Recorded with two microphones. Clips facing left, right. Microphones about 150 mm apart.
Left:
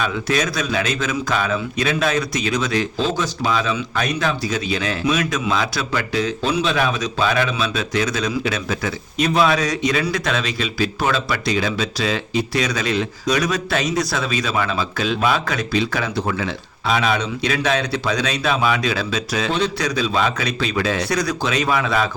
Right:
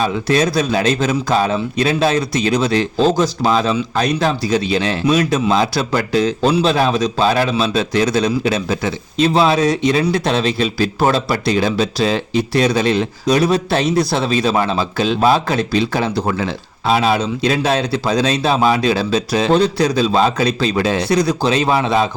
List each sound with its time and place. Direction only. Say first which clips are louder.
0.0 s a man's voice: right 5 dB; 35° right (ahead or behind)